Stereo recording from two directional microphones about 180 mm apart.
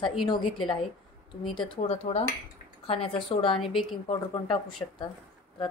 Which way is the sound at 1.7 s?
35° left (ahead or behind).